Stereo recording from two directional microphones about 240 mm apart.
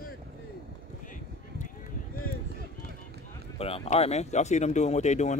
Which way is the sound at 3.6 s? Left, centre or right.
Left.